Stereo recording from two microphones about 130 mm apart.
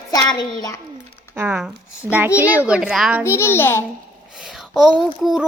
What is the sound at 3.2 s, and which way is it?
Speech, 20° left (ahead or behind).